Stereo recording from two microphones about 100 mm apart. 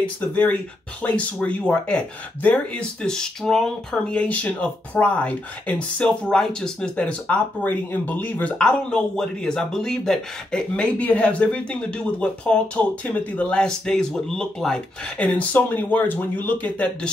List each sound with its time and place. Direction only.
0.0 s speech: 15° left (ahead or behind)